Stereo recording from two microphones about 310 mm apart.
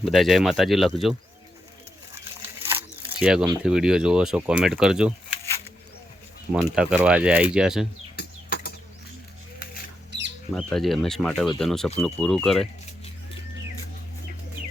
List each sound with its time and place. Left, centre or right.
0.0 s speech: centre
2.6 s speech: centre
6.5 s speech: centre
8.1 s bird flight: left
10.1 s a sound: right
10.5 s speech: centre